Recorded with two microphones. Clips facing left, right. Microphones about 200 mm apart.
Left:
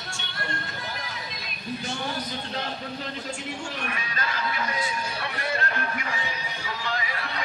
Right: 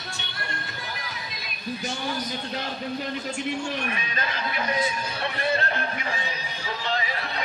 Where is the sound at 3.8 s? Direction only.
25° right (ahead or behind).